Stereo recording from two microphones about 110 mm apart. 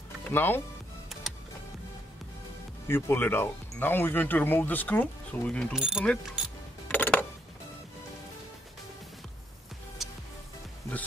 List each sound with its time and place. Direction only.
0.2 s speech: 20° left (ahead or behind)
2.9 s speech: 20° left (ahead or behind)
5.7 s speech: 5° right (ahead or behind)
6.4 s music: 5° right (ahead or behind)
6.9 s music: 15° left (ahead or behind)
10.0 s music: centre (ahead or behind)